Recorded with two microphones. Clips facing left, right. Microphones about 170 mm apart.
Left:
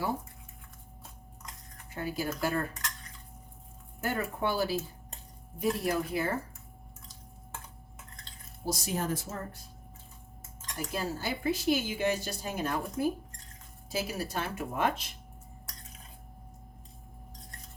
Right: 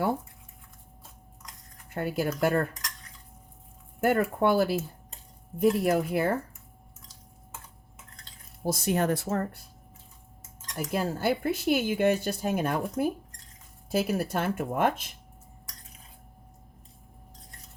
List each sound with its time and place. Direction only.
1.9 s speech: 60° right (ahead or behind)
4.0 s speech: 60° right (ahead or behind)
8.6 s speech: 55° right (ahead or behind)
10.8 s speech: 60° right (ahead or behind)